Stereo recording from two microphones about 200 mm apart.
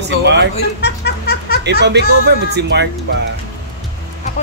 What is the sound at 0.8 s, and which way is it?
Music, 50° left (ahead or behind).